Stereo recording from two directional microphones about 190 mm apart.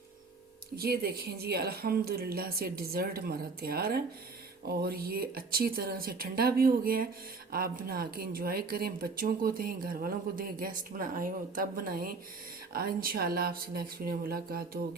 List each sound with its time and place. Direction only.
0.8 s a woman's voice: 55° right (ahead or behind)